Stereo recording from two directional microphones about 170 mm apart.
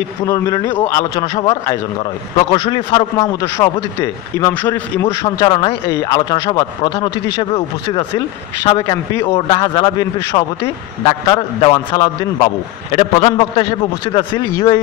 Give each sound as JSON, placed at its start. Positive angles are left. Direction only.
{"t": 0.2, "sound": "a man's voice", "side_deg": 20}
{"t": 3.3, "sound": "a man's voice", "side_deg": 20}
{"t": 5.4, "sound": "speech", "side_deg": 30}
{"t": 8.6, "sound": "speech", "side_deg": 30}
{"t": 9.1, "sound": "a man's voice", "side_deg": 15}
{"t": 9.5, "sound": "a man's voice", "side_deg": 30}